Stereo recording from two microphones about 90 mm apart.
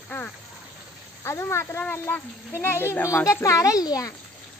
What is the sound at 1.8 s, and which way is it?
Speech, 20° left (ahead or behind).